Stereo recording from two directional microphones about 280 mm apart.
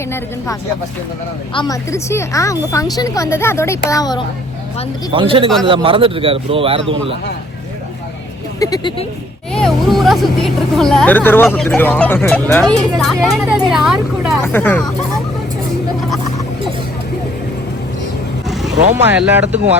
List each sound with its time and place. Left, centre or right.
1.5 s speech: centre
5.1 s a man's voice: centre
8.5 s speech: centre
9.5 s speech: centre
19.1 s speech: centre